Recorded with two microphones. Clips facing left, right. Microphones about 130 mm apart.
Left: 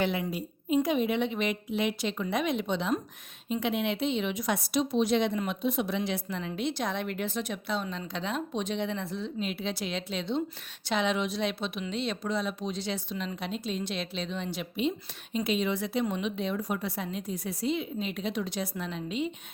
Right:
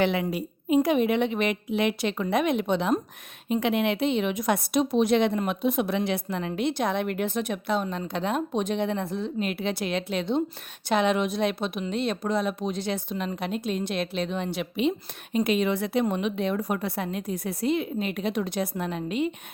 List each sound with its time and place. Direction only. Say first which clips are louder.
0.0 s a woman's voice: right 5 dB; 75° right (ahead or behind)
15.4 s a woman's voice: right 3 dB; 60° right (ahead or behind)